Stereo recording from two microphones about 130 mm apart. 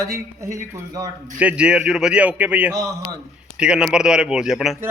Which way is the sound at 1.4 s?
10° right (ahead or behind).